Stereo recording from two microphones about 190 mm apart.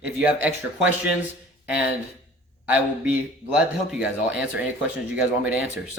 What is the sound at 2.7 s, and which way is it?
A man's voice, 5° right (ahead or behind).